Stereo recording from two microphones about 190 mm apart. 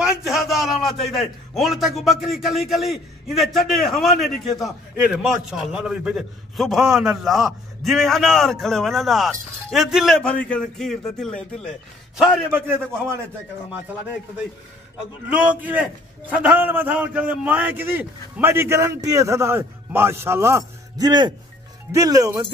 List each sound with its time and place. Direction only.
0.0 s a man's voice: centre (ahead or behind)
12.2 s a man's voice: 10° right (ahead or behind)
15.2 s a man's voice: 5° right (ahead or behind)